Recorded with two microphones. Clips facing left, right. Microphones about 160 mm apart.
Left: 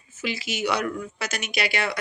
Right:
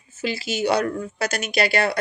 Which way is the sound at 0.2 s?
30° right (ahead or behind).